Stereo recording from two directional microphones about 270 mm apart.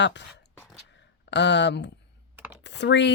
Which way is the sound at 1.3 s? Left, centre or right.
Left.